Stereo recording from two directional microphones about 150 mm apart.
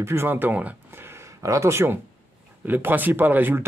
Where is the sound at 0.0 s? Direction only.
15° right (ahead or behind).